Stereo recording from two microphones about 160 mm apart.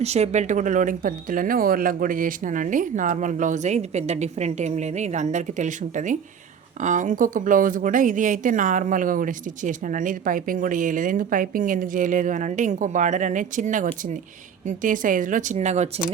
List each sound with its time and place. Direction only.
0.0 s a woman's voice: 45° right (ahead or behind)